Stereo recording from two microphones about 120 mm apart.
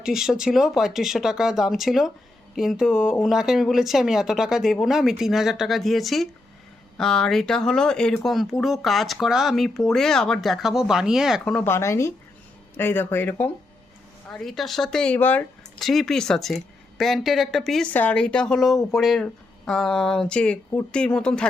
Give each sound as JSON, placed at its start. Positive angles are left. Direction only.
{"t": 0.0, "sound": "speech", "side_deg": -5}
{"t": 11.4, "sound": "speech", "side_deg": 10}
{"t": 11.7, "sound": "speech", "side_deg": 25}
{"t": 14.3, "sound": "speech", "side_deg": 5}
{"t": 15.8, "sound": "speech", "side_deg": 0}
{"t": 17.9, "sound": "speech", "side_deg": 10}